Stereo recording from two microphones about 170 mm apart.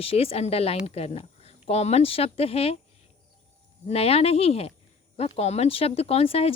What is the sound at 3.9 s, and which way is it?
Speech, 35° left (ahead or behind).